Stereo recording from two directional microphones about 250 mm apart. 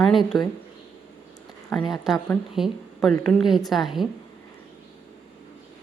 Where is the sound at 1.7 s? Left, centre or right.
Centre.